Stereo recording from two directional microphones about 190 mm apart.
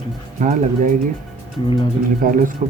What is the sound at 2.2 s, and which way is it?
Speech, 45° right (ahead or behind).